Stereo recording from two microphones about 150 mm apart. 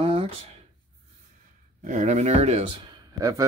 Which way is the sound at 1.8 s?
55° right (ahead or behind).